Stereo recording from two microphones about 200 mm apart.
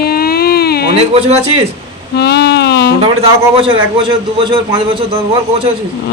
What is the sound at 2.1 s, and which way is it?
Music, 55° left (ahead or behind).